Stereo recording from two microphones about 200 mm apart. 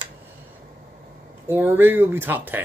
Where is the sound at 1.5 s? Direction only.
10° right (ahead or behind).